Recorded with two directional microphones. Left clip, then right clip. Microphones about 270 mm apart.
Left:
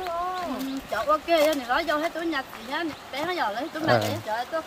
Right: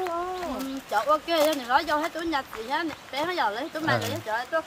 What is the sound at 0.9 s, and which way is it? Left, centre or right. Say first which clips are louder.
Speech: left 1 dB; right.